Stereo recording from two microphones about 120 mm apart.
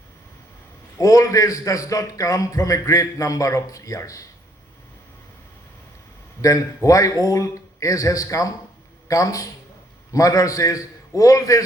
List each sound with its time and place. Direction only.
0.9 s a man's voice: 30° left (ahead or behind)
6.8 s a man's voice: 30° left (ahead or behind)